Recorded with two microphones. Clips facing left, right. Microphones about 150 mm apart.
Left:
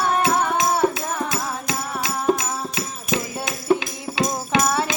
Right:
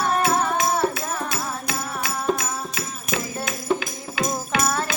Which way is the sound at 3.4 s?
25° left (ahead or behind).